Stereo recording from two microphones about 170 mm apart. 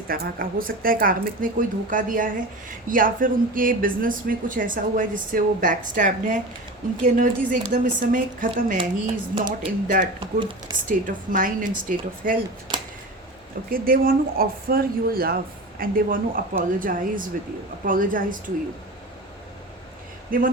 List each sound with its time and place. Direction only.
0.1 s a woman's voice: 55° right (ahead or behind)
9.3 s speech: 30° right (ahead or behind)
10.8 s a woman's voice: 55° right (ahead or behind)
13.7 s a woman's voice: 60° right (ahead or behind)
20.3 s speech: 55° right (ahead or behind)